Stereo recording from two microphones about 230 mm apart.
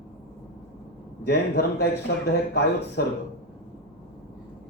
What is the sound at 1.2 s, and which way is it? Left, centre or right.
A man's voice, left.